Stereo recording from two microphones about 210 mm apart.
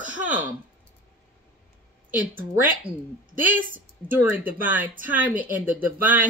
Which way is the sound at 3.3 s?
40° right (ahead or behind).